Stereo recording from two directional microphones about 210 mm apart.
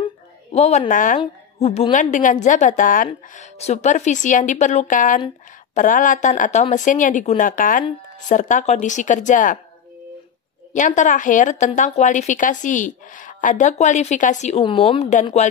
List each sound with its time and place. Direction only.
0.0 s a sound: 30° left (ahead or behind)
1.2 s a woman's voice: 30° left (ahead or behind)
10.7 s a woman's voice: 35° left (ahead or behind)